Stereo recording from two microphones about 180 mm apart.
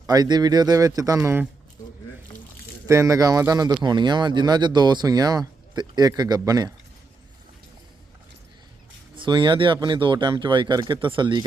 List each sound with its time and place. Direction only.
0.1 s speech: 20° right (ahead or behind)
2.8 s speech: 15° right (ahead or behind)
9.1 s speech: 25° right (ahead or behind)